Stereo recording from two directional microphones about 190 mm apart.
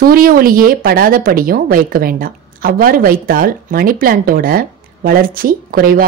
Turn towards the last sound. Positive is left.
turn(degrees=-50)  # may be behind; listen again after turning